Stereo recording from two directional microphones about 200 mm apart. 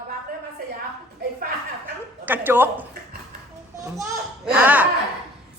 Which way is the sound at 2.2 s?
10° right (ahead or behind).